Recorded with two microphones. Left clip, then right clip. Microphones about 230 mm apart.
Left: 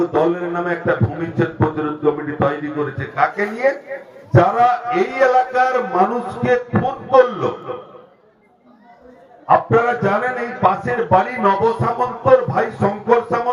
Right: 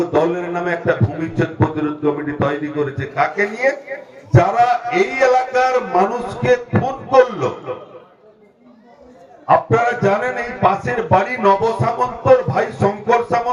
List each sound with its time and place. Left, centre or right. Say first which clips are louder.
0.0 s a man's voice: even; right
9.5 s a man's voice: even; right